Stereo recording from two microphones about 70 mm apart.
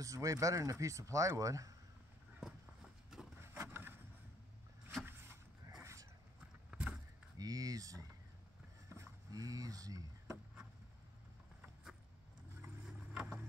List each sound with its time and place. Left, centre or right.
0.0 s speech: right
2.4 s horse: centre
3.3 s vehicle: right
5.8 s a sound: right
6.7 s vehicle: centre
7.3 s speech: right
8.8 s a sound: right
9.3 s speech: right
12.8 s vehicle: centre